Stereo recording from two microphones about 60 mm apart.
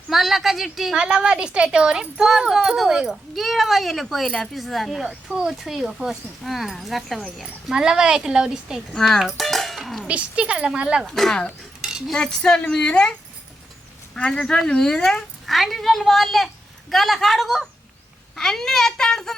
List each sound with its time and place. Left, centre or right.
0.1 s a sound: centre
0.9 s speech: centre
7.4 s speech: centre
9.0 s speech: centre
9.2 s music: centre
10.1 s speech: right
11.0 s a woman's voice: centre
11.8 s cutlery: centre
12.1 s a woman's voice: centre
14.2 s a woman's voice: centre